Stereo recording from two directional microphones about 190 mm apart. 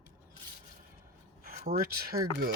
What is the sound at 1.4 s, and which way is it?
Speech, 45° right (ahead or behind).